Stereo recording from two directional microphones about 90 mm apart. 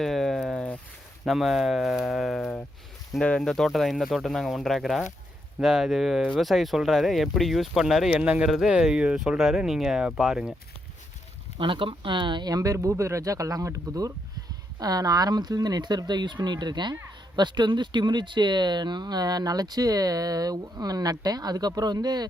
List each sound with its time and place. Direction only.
0.0 s a sound: 5° left (ahead or behind)
1.2 s speech: centre (ahead or behind)
8.1 s speech: 15° right (ahead or behind)
11.5 s speech: 65° right (ahead or behind)
12.5 s speech: 40° right (ahead or behind)